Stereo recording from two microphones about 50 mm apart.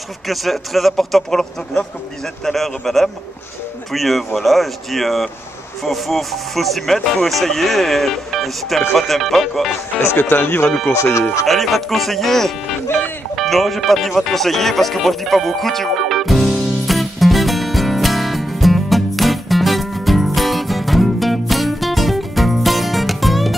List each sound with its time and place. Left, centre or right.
0.3 s a man's voice: centre
10.1 s speech: left
10.9 s speech: left
11.4 s a man's voice: centre
13.4 s music: centre